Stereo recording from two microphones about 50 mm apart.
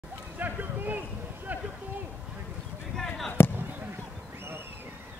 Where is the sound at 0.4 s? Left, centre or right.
Right.